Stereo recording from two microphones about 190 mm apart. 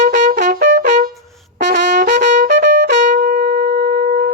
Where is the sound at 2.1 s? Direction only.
50° right (ahead or behind).